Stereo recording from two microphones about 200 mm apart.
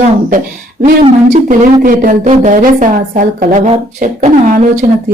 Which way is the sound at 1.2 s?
40° right (ahead or behind).